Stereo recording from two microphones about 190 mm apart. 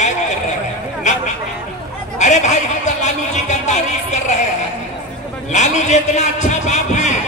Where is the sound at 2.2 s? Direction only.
40° left (ahead or behind).